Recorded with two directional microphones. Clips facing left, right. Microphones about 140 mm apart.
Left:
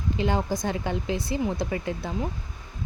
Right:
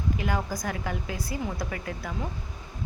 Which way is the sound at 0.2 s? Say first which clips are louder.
Left 4 dB; 25° left (ahead or behind).